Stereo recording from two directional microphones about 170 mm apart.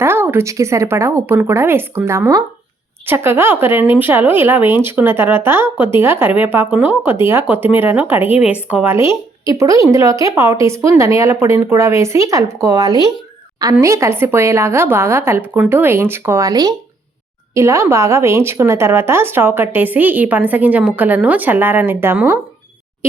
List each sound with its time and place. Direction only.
0.0 s a woman's voice: 15° right (ahead or behind)